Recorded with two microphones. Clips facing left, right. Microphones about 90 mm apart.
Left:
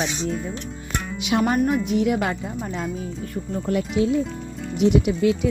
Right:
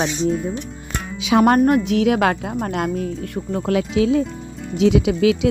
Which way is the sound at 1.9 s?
90° right.